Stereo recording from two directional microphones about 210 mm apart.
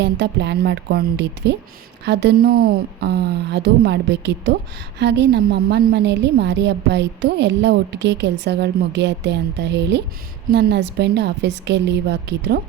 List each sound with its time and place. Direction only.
0.0 s a woman's voice: 55° right (ahead or behind)